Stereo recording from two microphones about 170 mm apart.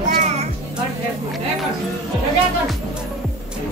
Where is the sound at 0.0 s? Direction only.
45° right (ahead or behind).